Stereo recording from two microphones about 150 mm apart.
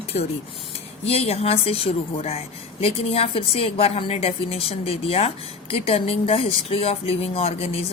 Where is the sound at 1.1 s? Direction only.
45° left (ahead or behind).